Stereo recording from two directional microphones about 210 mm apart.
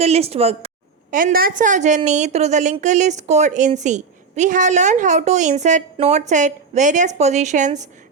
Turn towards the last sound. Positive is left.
turn(degrees=-35)  # may be behind; listen again after turning